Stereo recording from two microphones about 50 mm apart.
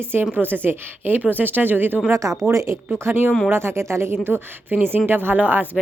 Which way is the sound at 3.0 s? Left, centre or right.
Right.